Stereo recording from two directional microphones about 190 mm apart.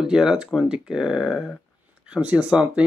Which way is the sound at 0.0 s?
5° right (ahead or behind).